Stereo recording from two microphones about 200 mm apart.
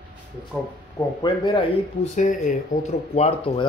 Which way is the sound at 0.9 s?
20° left (ahead or behind).